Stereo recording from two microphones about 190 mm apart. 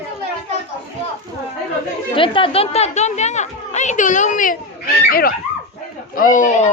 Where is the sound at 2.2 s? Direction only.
30° left (ahead or behind).